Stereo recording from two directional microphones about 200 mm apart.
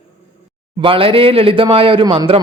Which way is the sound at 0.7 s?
25° right (ahead or behind).